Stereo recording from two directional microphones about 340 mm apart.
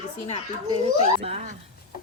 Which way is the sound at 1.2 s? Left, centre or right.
Centre.